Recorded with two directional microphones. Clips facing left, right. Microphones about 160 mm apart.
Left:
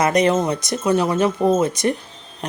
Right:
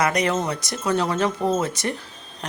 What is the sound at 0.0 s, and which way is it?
Speech, 25° left (ahead or behind).